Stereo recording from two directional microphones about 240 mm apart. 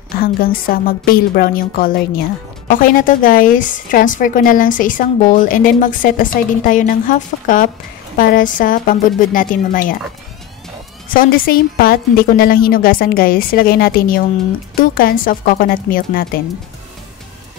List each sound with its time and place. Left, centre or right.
0.2 s a woman's voice: left
11.1 s a woman's voice: left